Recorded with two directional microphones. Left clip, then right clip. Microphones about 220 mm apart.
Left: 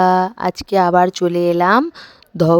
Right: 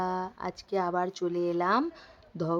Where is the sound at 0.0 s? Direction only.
45° left (ahead or behind).